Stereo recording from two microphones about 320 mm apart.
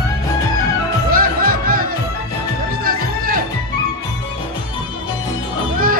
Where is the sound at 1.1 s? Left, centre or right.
Right.